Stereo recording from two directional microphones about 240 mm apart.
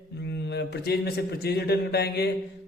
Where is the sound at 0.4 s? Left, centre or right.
Left.